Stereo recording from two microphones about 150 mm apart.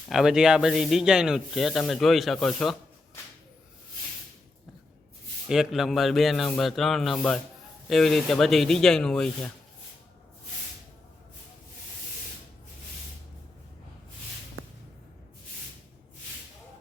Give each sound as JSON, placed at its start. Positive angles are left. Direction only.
{"t": 0.1, "sound": "speech", "side_deg": 0}
{"t": 5.5, "sound": "speech", "side_deg": 0}